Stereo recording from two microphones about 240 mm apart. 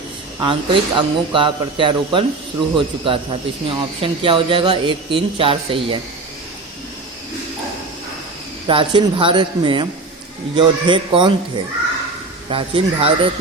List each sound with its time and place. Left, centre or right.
0.3 s speech: centre
8.6 s speech: right